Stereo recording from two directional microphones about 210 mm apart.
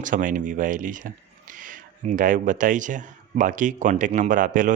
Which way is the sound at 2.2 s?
40° right (ahead or behind).